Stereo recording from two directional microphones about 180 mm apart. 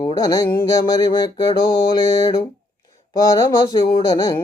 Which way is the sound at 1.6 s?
25° left (ahead or behind).